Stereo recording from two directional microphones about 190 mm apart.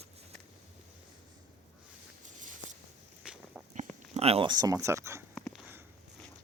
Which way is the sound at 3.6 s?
Centre (ahead or behind).